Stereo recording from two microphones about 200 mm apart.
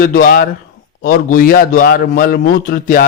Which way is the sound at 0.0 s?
45° left (ahead or behind).